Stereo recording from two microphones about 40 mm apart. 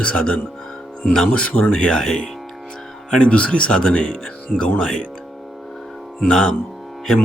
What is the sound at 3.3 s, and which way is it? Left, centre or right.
Speech, left.